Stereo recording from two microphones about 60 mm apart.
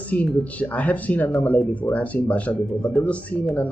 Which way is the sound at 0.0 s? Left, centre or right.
Left.